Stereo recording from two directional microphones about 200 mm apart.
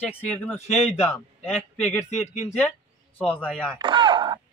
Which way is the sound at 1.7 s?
5° left (ahead or behind).